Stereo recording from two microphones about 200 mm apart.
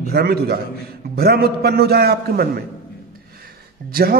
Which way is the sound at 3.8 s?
50° right (ahead or behind).